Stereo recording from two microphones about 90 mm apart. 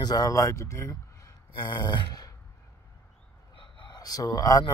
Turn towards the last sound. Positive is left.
turn(degrees=40)  # may be behind; listen again after turning